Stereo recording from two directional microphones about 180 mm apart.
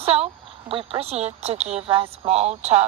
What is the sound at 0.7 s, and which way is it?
Speech, 30° right (ahead or behind).